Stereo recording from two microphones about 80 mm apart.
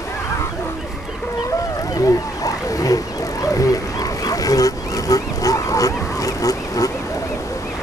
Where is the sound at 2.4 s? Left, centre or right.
Left.